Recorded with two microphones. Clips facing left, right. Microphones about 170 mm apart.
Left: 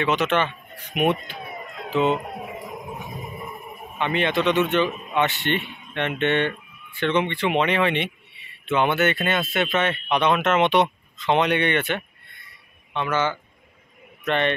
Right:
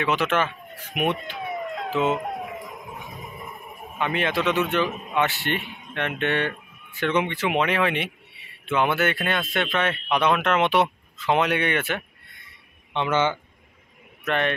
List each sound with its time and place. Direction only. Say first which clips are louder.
0.0 s speech: left 1 dB; centre (ahead or behind)
4.0 s speech: left 2 dB; 5° right (ahead or behind)
12.9 s speech: right 1 dB; 20° right (ahead or behind)
14.2 s a man's voice: left 2 dB; 5° right (ahead or behind)